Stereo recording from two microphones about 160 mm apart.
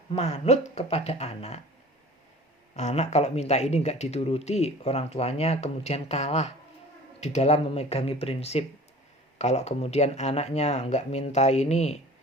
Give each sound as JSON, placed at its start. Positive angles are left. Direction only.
{"t": 0.2, "sound": "speech", "side_deg": 40}
{"t": 2.7, "sound": "speech", "side_deg": 45}